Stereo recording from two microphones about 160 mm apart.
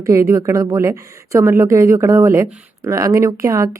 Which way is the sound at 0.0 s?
20° right (ahead or behind).